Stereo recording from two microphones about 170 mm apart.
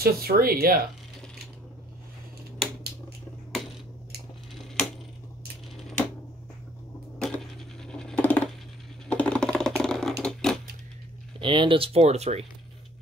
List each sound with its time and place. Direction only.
0.0 s speech: 60° right (ahead or behind)
7.2 s a sound: centre (ahead or behind)
9.8 s typing: 5° left (ahead or behind)
10.2 s typewriter: 5° left (ahead or behind)
11.3 s speech: 30° right (ahead or behind)